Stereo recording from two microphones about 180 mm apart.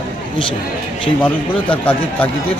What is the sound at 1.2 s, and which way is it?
Speech, 10° left (ahead or behind).